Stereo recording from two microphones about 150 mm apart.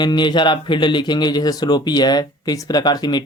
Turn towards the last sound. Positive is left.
turn(degrees=30)  # may be behind; listen again after turning